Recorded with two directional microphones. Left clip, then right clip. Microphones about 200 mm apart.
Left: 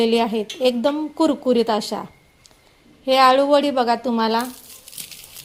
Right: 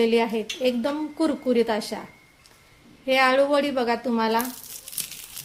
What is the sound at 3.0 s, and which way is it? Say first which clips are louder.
Speech: left 5 dB; 30° left (ahead or behind).